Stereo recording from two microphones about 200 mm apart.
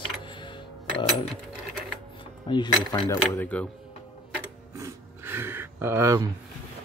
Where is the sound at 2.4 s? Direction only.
20° left (ahead or behind).